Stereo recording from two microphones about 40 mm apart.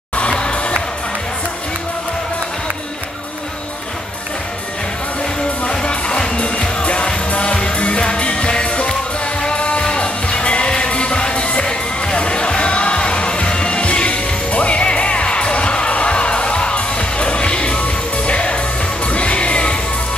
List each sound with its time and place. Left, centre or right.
0.3 s music: left
5.7 s music: left